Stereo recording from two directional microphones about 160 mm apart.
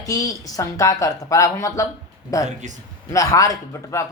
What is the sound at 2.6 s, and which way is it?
Speech, 50° right (ahead or behind).